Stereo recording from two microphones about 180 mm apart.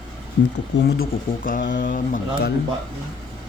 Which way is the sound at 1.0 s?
50° left (ahead or behind).